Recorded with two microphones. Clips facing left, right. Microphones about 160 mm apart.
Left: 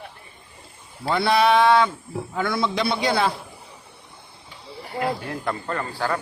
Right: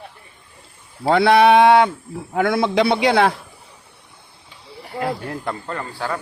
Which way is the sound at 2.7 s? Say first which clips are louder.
Right 8 dB; 80° right.